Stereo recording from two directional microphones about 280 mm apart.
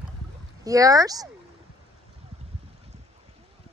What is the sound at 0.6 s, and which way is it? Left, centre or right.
Speech, centre.